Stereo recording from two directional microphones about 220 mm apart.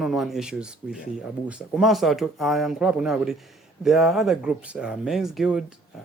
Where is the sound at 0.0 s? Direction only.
Centre (ahead or behind).